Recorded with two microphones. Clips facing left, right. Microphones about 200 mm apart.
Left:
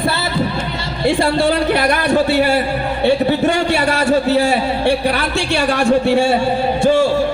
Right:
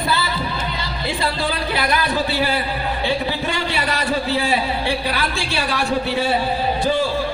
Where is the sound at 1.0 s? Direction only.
65° left (ahead or behind); by 4.5 s 45° left (ahead or behind).